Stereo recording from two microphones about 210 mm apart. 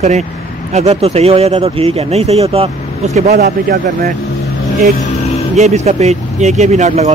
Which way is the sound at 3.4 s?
45° right (ahead or behind).